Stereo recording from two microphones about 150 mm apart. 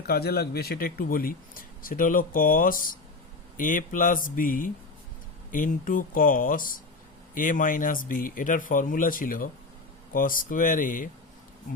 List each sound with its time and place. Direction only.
0.1 s speech: 90° left; by 11.1 s 65° left (ahead or behind)